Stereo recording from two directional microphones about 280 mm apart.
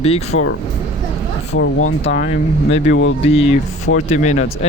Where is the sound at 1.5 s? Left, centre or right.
Left.